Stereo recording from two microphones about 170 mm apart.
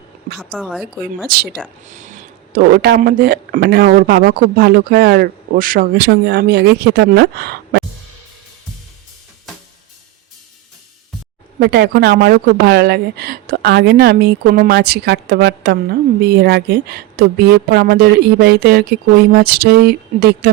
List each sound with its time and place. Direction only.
0.3 s a woman's voice: centre (ahead or behind)
1.8 s speech: 45° right (ahead or behind); by 7.9 s 75° right (ahead or behind)
11.6 s a woman's voice: 70° right (ahead or behind)